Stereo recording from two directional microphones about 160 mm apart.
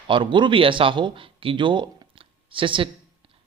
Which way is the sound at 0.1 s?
30° right (ahead or behind).